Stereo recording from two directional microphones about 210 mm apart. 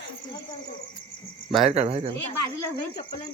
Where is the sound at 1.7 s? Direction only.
30° right (ahead or behind).